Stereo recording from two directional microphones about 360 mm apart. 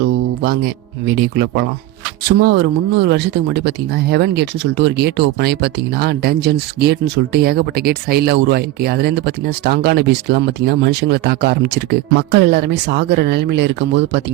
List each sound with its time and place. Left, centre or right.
0.4 s speech: right